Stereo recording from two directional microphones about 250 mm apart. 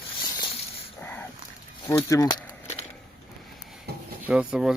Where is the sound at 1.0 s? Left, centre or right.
Centre.